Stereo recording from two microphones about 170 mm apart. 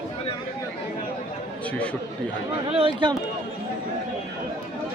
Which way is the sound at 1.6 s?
10° left (ahead or behind).